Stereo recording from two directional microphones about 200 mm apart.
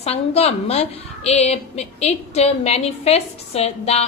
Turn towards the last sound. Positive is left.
turn(degrees=30)  # may be behind; listen again after turning